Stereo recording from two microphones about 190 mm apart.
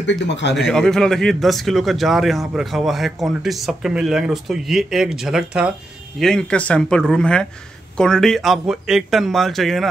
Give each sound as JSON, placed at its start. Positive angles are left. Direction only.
{"t": 0.0, "sound": "speech", "side_deg": 70}
{"t": 0.6, "sound": "a man's voice", "side_deg": 0}